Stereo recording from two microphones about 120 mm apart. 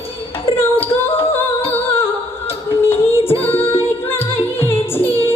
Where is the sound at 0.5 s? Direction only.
20° left (ahead or behind).